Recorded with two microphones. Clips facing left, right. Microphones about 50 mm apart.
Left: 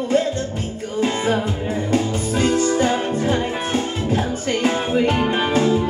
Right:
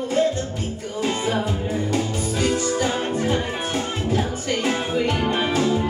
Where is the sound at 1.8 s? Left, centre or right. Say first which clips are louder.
Left 3 dB; left.